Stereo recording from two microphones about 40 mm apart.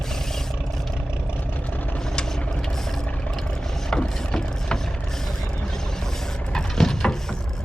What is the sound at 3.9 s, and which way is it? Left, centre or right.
Ratchet, centre.